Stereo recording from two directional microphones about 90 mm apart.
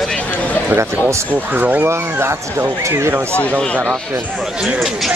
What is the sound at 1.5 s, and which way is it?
Speech, 20° right (ahead or behind).